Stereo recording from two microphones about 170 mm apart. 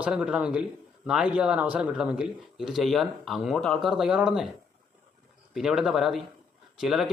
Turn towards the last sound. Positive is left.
turn(degrees=0)  # may be behind; listen again after turning